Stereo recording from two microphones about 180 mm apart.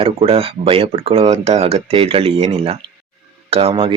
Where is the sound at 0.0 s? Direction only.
30° right (ahead or behind).